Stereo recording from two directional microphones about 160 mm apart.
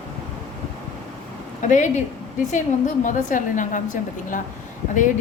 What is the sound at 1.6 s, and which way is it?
A woman's voice, 50° left (ahead or behind).